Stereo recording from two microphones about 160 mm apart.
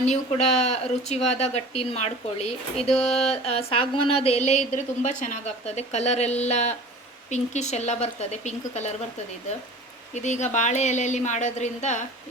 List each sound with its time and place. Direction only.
0.0 s speech: 45° left (ahead or behind)
2.9 s a sound: 5° left (ahead or behind)
3.2 s speech: 40° left (ahead or behind)
10.2 s speech: 45° left (ahead or behind)